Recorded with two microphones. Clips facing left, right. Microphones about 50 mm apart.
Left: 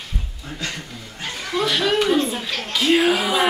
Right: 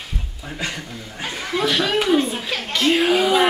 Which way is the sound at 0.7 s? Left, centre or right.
Centre.